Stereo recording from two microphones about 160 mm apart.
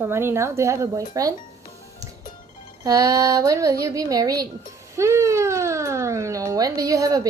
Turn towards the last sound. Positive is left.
turn(degrees=-20)  # may be behind; listen again after turning